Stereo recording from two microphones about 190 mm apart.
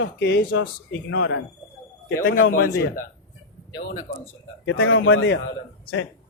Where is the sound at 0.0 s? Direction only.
70° left (ahead or behind).